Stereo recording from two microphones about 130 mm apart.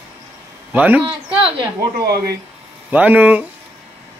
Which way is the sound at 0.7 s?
10° right (ahead or behind).